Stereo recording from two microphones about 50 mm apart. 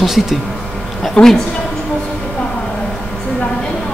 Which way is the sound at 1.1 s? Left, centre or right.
Centre.